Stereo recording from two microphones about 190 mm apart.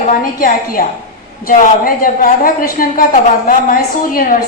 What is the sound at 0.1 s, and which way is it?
A woman's voice, 45° left (ahead or behind).